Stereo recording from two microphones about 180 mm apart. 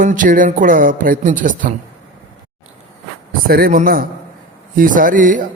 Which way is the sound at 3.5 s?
55° right (ahead or behind).